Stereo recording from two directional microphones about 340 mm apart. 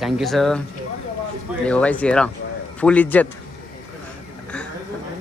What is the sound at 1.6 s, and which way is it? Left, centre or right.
Speech, centre.